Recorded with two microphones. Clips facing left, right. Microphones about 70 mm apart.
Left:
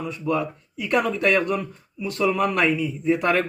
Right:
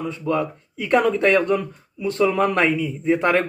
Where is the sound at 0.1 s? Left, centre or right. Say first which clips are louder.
Right 1 dB; right.